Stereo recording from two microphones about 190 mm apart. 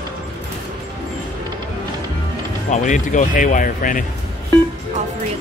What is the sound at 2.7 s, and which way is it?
Speech, 40° left (ahead or behind).